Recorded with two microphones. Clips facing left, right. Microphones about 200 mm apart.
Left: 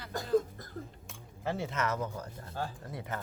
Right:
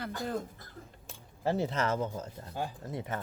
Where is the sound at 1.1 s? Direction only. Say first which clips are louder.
Right 5 dB; 35° right (ahead or behind).